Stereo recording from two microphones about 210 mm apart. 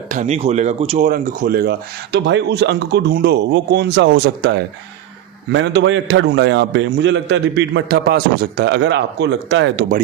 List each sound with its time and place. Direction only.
0.1 s speech: 35° right (ahead or behind)
2.1 s a man's voice: 55° right (ahead or behind)